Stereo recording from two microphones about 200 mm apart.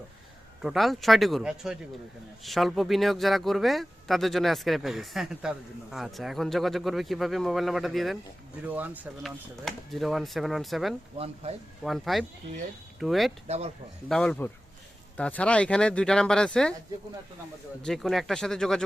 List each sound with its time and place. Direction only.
0.6 s speech: centre (ahead or behind)
11.4 s speech: 30° right (ahead or behind)
11.8 s speech: centre (ahead or behind)
17.8 s speech: centre (ahead or behind)